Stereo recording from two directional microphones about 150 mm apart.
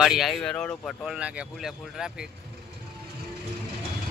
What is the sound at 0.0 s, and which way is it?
Speech, centre (ahead or behind).